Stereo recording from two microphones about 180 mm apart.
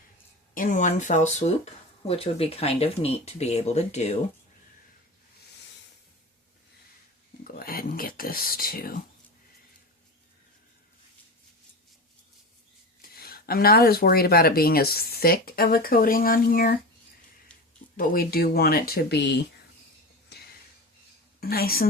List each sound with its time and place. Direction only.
0.5 s speech: 45° left (ahead or behind)
7.4 s speech: 55° left (ahead or behind)
13.0 s speech: 55° left (ahead or behind)
17.9 s speech: 55° left (ahead or behind)
20.3 s a sound: 65° left (ahead or behind)
21.5 s speech: 55° left (ahead or behind)